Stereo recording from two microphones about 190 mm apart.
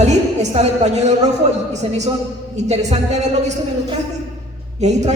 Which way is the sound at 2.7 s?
35° right (ahead or behind).